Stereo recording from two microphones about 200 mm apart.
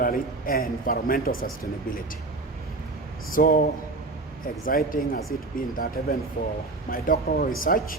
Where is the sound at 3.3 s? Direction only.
45° left (ahead or behind).